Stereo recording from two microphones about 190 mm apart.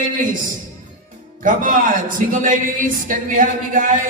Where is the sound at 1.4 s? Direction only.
45° right (ahead or behind).